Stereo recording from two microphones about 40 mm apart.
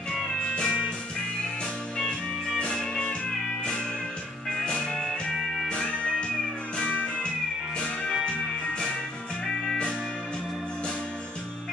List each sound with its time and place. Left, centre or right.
0.4 s music: left
2.0 s music: centre
4.6 s music: centre
5.7 s music: left
8.3 s music: left